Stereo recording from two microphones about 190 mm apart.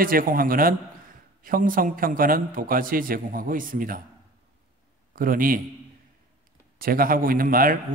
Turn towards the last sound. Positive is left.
turn(degrees=-50)  # may be behind; listen again after turning